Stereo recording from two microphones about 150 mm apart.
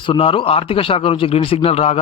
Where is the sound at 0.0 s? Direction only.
35° left (ahead or behind).